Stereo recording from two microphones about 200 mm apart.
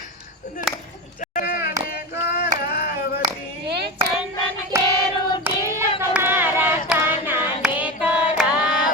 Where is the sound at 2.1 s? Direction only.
55° left (ahead or behind).